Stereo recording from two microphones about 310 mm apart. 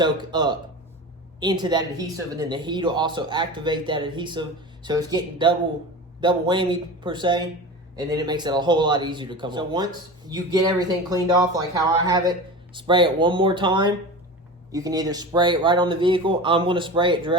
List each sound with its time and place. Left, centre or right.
0.0 s speech: centre